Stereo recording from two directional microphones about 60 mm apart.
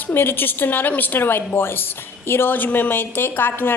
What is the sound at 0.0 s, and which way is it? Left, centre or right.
A woman's voice, left.